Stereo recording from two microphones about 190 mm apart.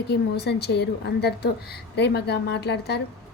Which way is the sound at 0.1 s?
60° left (ahead or behind).